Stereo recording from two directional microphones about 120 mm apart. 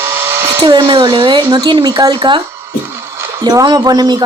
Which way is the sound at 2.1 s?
45° right (ahead or behind).